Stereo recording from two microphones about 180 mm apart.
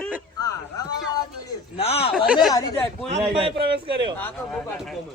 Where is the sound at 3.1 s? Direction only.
35° right (ahead or behind).